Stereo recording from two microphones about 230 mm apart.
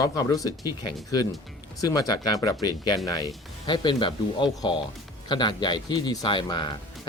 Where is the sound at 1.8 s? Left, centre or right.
Centre.